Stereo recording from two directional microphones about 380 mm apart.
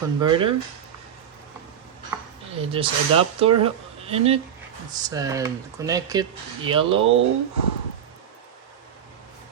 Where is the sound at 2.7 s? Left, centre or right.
Centre.